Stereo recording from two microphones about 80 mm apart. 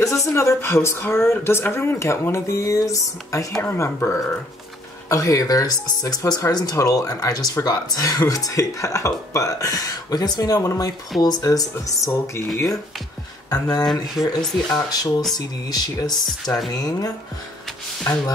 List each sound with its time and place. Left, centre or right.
0.2 s speech: left